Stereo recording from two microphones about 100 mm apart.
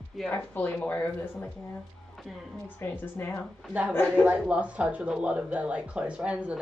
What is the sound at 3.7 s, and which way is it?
Speech, 15° right (ahead or behind).